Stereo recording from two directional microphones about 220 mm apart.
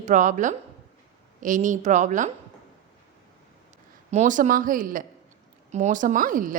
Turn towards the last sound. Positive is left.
turn(degrees=-40)  # may be behind; listen again after turning